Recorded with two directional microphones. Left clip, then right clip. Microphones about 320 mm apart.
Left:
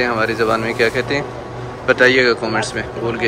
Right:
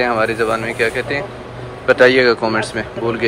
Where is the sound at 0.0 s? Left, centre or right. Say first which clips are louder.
Right 1 dB; centre.